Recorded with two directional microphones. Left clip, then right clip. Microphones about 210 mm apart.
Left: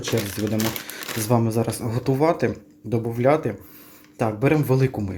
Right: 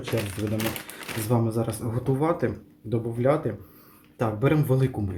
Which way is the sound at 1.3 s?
30° left (ahead or behind).